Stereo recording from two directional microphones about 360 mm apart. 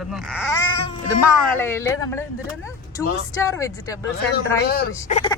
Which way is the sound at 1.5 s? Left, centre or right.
Centre.